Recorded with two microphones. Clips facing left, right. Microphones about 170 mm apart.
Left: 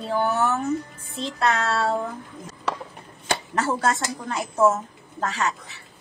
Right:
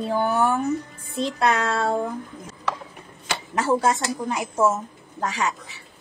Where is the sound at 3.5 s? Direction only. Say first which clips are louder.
Right 4 dB; 15° right (ahead or behind).